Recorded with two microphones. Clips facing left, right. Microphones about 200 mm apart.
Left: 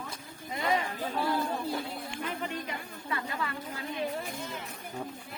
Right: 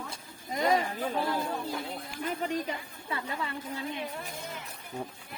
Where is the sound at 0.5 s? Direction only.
40° right (ahead or behind).